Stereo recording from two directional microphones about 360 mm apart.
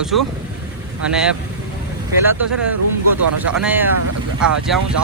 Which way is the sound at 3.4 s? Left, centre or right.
Centre.